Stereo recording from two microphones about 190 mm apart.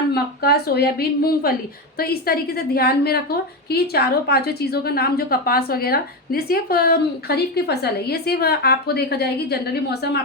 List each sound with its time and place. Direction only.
0.1 s a woman's voice: 55° left (ahead or behind)